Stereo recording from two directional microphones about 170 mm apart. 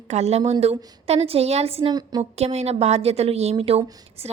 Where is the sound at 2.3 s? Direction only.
40° right (ahead or behind).